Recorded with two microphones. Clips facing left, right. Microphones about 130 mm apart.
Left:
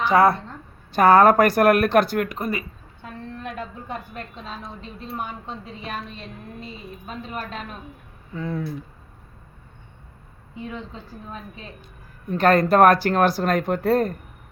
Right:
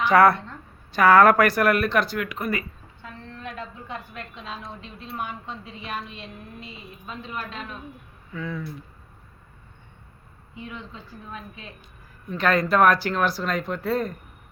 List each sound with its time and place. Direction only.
0.0 s a woman's voice: 30° left (ahead or behind); by 2.4 s 50° left (ahead or behind)
2.4 s speech: 25° left (ahead or behind)
3.0 s a sound: 50° left (ahead or behind)
3.8 s a woman's voice: 45° left (ahead or behind)
8.3 s speech: 35° left (ahead or behind)
10.5 s a woman's voice: 35° left (ahead or behind)